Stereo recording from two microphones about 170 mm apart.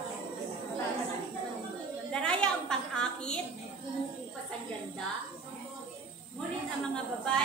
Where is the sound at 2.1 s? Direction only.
5° left (ahead or behind).